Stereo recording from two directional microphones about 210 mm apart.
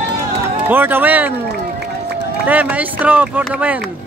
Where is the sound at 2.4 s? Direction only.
5° right (ahead or behind).